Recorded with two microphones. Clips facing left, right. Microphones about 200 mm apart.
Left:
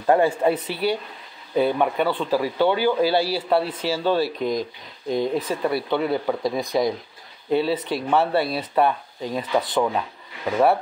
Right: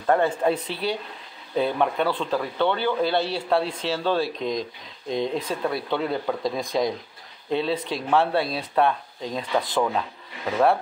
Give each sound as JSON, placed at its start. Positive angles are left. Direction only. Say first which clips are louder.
{"t": 0.0, "sound": "speech", "louder": "left 3 dB", "side_deg": 10}